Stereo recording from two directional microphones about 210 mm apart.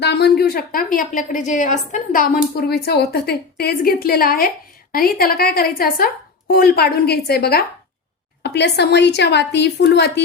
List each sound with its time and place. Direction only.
0.0 s a woman's voice: 50° left (ahead or behind)